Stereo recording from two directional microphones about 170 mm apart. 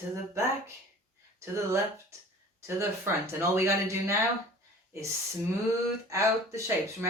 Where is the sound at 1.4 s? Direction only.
15° right (ahead or behind).